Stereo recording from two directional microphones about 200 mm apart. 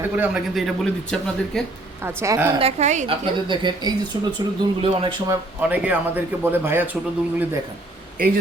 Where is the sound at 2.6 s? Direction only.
30° right (ahead or behind).